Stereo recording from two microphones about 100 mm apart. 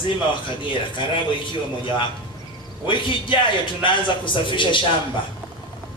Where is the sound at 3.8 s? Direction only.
55° left (ahead or behind).